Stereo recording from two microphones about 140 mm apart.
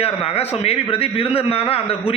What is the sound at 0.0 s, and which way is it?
A man's voice, 45° left (ahead or behind).